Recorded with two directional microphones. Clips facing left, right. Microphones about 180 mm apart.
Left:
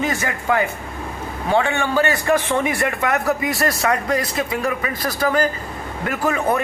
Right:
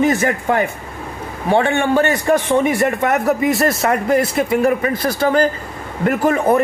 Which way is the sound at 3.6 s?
25° right (ahead or behind).